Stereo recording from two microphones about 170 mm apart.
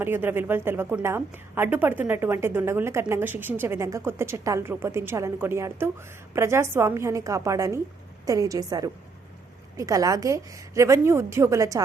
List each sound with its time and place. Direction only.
0.0 s a woman's voice: 10° right (ahead or behind)